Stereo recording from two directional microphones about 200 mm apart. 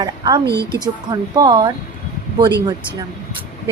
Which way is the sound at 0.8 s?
20° right (ahead or behind).